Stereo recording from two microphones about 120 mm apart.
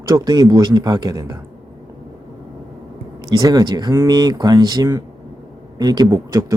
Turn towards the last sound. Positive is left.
turn(degrees=-35)  # may be behind; listen again after turning